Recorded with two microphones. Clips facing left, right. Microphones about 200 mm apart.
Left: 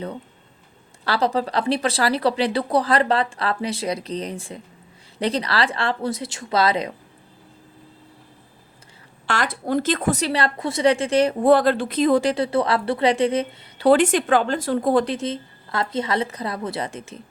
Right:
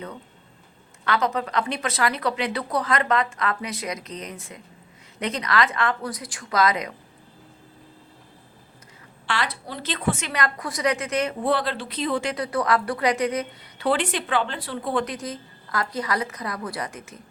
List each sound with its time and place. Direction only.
1.0 s a woman's voice: 35° left (ahead or behind)
9.2 s speech: 45° left (ahead or behind)
11.4 s speech: 45° left (ahead or behind)
15.0 s a woman's voice: 25° left (ahead or behind)